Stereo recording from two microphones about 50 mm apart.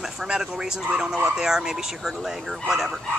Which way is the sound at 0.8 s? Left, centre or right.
Centre.